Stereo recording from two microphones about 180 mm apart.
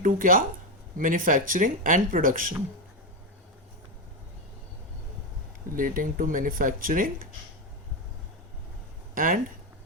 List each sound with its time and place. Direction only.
0.0 s speech: 50° right (ahead or behind)
5.7 s speech: 50° right (ahead or behind)
9.1 s speech: 50° right (ahead or behind)